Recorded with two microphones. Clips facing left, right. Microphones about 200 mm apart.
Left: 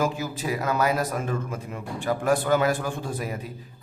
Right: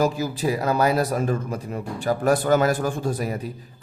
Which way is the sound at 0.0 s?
35° right (ahead or behind).